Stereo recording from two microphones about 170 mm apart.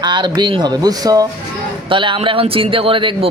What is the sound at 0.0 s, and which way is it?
A man's voice, 25° right (ahead or behind).